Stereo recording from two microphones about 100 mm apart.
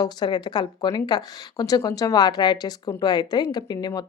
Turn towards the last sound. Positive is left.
turn(degrees=40)  # may be behind; listen again after turning